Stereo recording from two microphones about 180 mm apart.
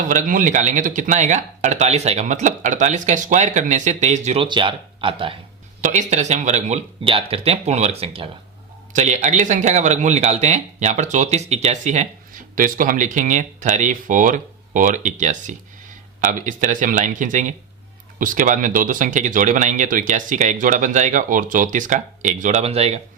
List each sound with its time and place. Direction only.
0.0 s speech: 45° right (ahead or behind)
4.4 s speech: 25° right (ahead or behind)
5.8 s speech: 45° right (ahead or behind)